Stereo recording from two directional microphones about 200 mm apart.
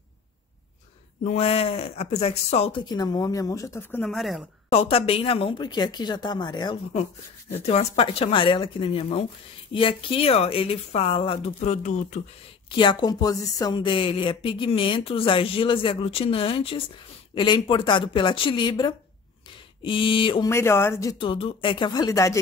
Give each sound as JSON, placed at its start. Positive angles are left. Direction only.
{"t": 1.2, "sound": "a woman's voice", "side_deg": 30}
{"t": 4.0, "sound": "a woman's voice", "side_deg": 0}
{"t": 4.6, "sound": "a woman's voice", "side_deg": 30}
{"t": 12.7, "sound": "a woman's voice", "side_deg": 20}
{"t": 20.4, "sound": "a woman's voice", "side_deg": 15}